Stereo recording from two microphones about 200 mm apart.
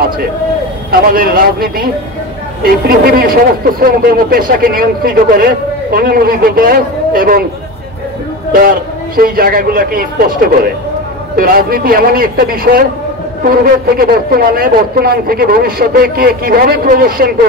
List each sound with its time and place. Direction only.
1.1 s a man's voice: 45° right (ahead or behind)
8.5 s a man's voice: 45° right (ahead or behind)